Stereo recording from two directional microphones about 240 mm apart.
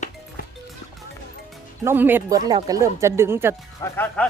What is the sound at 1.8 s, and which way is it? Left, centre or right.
Speech, centre.